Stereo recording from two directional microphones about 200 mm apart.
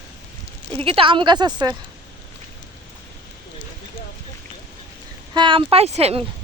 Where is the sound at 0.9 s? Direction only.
25° right (ahead or behind).